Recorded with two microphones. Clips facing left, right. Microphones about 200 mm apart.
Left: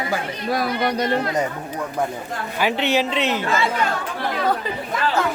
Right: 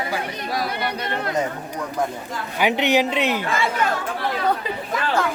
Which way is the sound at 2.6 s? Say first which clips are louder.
Right 2 dB; 15° right (ahead or behind).